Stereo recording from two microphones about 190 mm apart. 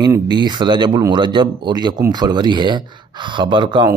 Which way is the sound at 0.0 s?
20° right (ahead or behind).